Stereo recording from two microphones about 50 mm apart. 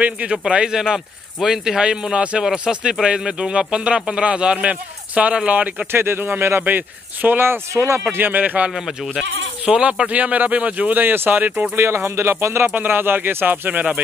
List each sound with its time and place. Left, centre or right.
0.5 s speech: centre
5.9 s speech: right
6.6 s speech: right
7.7 s speech: right
8.1 s speech: right
8.7 s speech: centre
9.7 s speech: centre; by 11.6 s right
11.7 s speech: right
12.6 s speech: right